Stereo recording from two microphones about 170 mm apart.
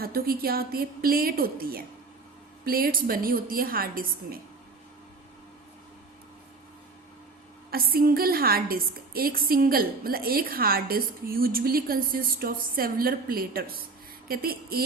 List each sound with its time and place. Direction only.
0.0 s a woman's voice: 60° right (ahead or behind)
7.7 s a woman's voice: 60° right (ahead or behind)